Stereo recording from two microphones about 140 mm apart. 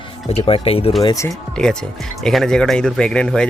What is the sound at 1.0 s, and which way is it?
Speech, 25° left (ahead or behind).